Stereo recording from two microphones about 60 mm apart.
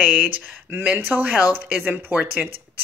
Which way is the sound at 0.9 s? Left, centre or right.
Right.